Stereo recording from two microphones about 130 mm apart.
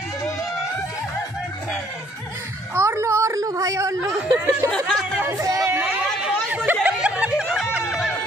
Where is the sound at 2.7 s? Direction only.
20° right (ahead or behind).